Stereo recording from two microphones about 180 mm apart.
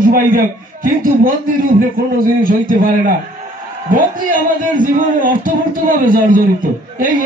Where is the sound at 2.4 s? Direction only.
50° right (ahead or behind).